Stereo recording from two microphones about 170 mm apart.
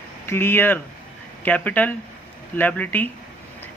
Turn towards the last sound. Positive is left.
turn(degrees=10)  # may be behind; listen again after turning